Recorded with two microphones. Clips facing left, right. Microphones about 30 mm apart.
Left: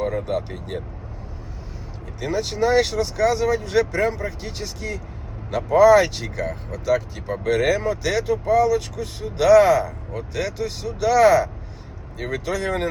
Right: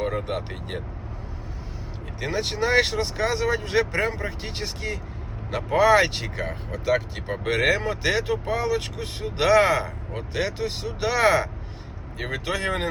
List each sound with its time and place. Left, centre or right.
0.0 s speech: right
2.2 s speech: right